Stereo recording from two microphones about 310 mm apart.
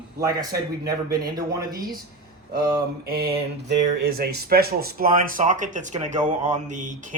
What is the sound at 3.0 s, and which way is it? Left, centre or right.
Speech, right.